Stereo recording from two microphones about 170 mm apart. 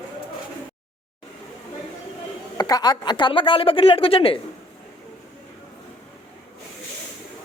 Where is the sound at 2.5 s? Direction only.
20° left (ahead or behind).